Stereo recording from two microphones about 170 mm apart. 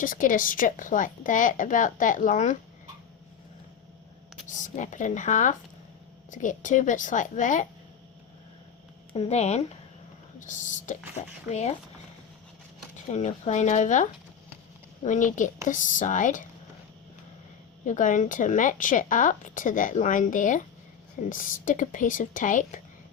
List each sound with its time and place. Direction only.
0.0 s speech: 50° left (ahead or behind)
4.4 s speech: 45° left (ahead or behind)
9.1 s speech: 40° left (ahead or behind)
13.1 s speech: 45° left (ahead or behind)
17.8 s speech: 45° left (ahead or behind)